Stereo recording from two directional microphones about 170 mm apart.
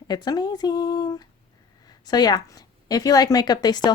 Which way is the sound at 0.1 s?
25° left (ahead or behind).